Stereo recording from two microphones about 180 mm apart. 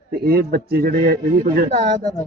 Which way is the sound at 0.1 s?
55° right (ahead or behind).